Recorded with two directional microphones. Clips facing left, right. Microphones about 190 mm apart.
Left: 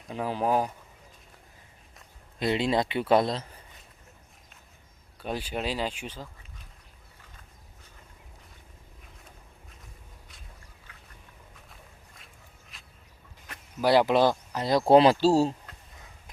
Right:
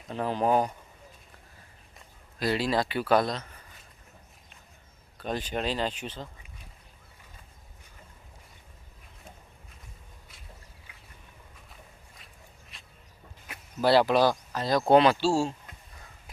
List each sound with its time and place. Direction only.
0.1 s speech: 10° left (ahead or behind)
2.4 s speech: 25° left (ahead or behind)
5.1 s speech: 10° left (ahead or behind)
10.9 s duck: 10° right (ahead or behind)
12.7 s a sound: centre (ahead or behind)
13.8 s speech: 15° left (ahead or behind); by 15.5 s 40° left (ahead or behind)